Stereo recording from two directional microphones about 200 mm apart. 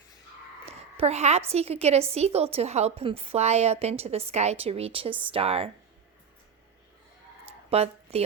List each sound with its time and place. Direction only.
0.6 s a woman's voice: 30° right (ahead or behind)
7.7 s speech: 30° right (ahead or behind)